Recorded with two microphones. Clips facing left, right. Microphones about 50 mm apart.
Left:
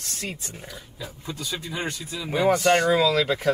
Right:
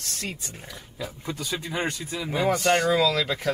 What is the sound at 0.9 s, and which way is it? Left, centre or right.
Speech, right.